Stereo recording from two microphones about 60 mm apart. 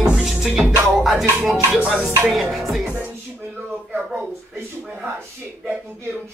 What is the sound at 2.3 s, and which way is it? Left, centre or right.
Music, centre.